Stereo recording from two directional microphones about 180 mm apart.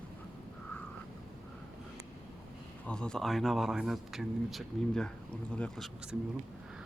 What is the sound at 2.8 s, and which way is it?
Speech, 5° left (ahead or behind).